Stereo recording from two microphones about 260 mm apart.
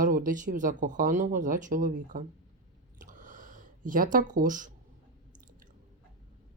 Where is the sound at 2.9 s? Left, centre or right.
Right.